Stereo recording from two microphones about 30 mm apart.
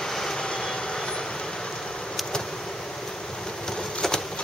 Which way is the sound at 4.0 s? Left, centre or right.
Left.